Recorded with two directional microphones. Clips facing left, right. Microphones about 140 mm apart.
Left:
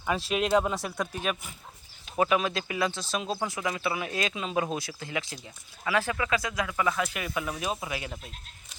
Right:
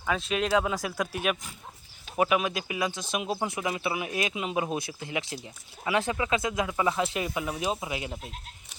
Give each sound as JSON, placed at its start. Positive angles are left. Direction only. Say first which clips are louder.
{"t": 0.0, "sound": "speech", "louder": "even", "side_deg": 5}